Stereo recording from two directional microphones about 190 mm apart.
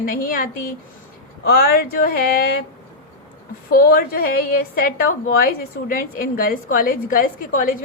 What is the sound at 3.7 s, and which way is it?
A woman's voice, 50° left (ahead or behind).